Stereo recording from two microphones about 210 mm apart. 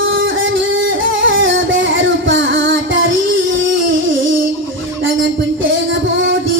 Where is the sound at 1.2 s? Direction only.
65° right (ahead or behind).